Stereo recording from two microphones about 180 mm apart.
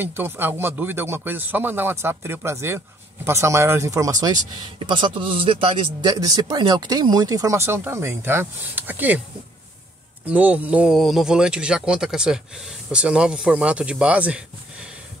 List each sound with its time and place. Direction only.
0.0 s a man's voice: 10° right (ahead or behind)
10.3 s speech: 10° right (ahead or behind)